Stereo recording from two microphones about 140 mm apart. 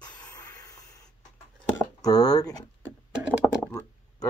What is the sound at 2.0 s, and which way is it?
Speech, 25° left (ahead or behind).